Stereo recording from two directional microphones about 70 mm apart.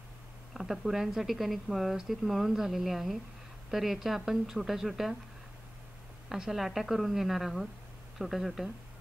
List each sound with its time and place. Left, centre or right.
0.6 s a woman's voice: centre
6.2 s a woman's voice: centre